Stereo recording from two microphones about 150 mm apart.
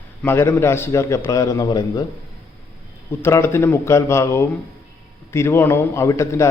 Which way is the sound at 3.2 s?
15° left (ahead or behind).